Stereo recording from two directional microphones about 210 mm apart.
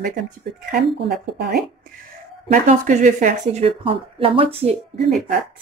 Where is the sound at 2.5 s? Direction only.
35° right (ahead or behind).